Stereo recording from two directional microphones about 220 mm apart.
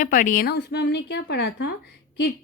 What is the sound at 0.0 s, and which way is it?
A woman's voice, 40° left (ahead or behind).